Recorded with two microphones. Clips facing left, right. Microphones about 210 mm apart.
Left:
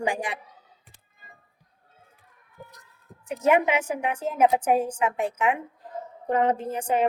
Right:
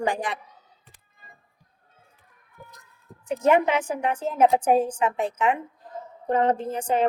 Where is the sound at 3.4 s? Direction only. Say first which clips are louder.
Right 1 dB; 10° left (ahead or behind).